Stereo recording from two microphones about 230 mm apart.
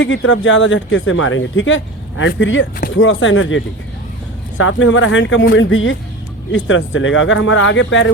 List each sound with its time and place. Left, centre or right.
0.0 s speech: left